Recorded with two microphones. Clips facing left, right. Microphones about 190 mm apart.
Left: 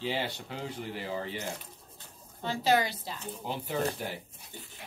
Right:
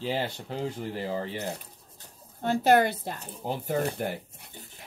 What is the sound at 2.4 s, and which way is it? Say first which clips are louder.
Speech: right 6 dB; 55° right (ahead or behind).